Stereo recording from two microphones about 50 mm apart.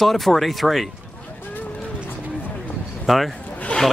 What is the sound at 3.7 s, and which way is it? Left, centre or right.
Snake, left.